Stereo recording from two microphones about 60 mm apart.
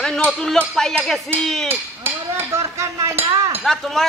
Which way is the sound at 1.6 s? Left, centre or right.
Right.